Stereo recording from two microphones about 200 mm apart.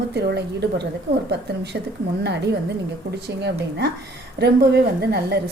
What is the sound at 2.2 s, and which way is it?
A woman's voice, 55° right (ahead or behind).